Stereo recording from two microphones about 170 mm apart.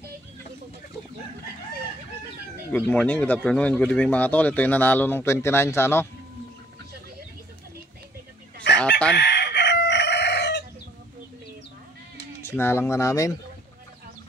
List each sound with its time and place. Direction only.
2.7 s speech: 10° left (ahead or behind)
9.1 s chicken: 75° left (ahead or behind)
12.4 s speech: 15° left (ahead or behind)